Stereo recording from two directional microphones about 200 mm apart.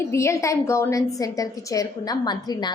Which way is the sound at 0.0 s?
15° left (ahead or behind).